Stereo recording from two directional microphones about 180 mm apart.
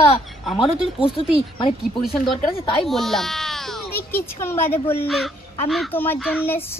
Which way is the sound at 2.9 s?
Centre (ahead or behind).